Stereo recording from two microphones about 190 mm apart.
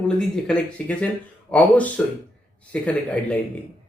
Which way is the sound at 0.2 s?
5° left (ahead or behind).